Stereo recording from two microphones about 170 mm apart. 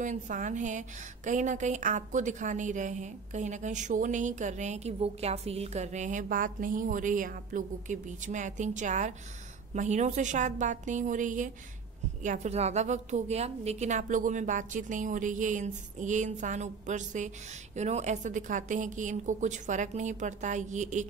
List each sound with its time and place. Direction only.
0.0 s a woman's voice: 50° right (ahead or behind)